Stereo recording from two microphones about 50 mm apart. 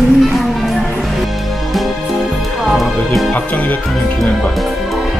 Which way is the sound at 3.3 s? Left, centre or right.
Left.